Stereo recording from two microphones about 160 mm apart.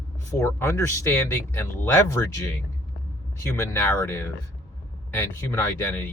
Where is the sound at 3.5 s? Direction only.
15° left (ahead or behind).